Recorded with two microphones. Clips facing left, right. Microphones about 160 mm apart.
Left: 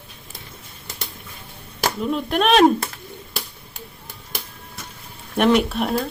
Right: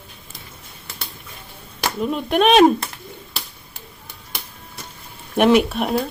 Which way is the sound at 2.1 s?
Centre (ahead or behind).